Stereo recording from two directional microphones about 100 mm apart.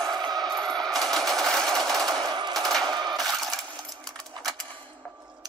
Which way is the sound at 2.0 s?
45° right (ahead or behind).